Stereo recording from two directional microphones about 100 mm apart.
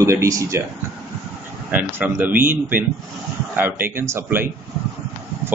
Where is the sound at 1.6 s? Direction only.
15° right (ahead or behind).